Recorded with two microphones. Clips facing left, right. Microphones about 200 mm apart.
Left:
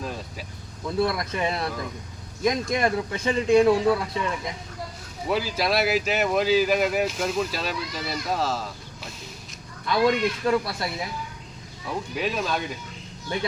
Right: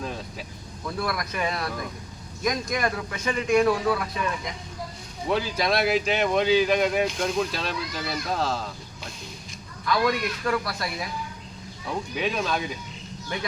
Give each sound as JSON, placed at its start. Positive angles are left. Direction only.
{"t": 0.0, "sound": "vehicle", "side_deg": 0}
{"t": 0.9, "sound": "speech", "side_deg": 25}
{"t": 5.3, "sound": "speech", "side_deg": 5}
{"t": 9.8, "sound": "speech", "side_deg": 25}
{"t": 11.9, "sound": "speech", "side_deg": 0}